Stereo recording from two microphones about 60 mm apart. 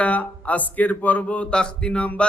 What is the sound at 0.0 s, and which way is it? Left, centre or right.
A man's voice, left.